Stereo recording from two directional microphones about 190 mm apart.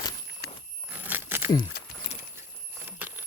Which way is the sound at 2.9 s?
10° right (ahead or behind).